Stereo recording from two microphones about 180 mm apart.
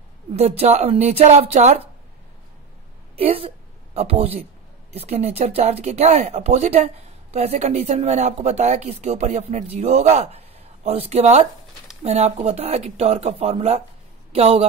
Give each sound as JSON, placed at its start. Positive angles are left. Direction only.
{"t": 0.3, "sound": "speech", "side_deg": -35}
{"t": 3.2, "sound": "a woman's voice", "side_deg": -30}